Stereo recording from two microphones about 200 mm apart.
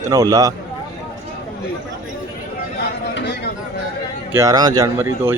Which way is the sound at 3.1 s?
60° left (ahead or behind).